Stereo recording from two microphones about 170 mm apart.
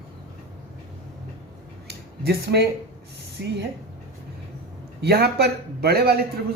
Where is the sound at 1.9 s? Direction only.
75° right (ahead or behind).